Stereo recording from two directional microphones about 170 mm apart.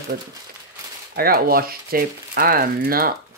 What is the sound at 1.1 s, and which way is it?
Speech, 60° right (ahead or behind).